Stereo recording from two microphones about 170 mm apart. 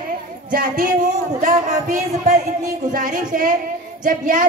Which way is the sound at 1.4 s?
45° right (ahead or behind).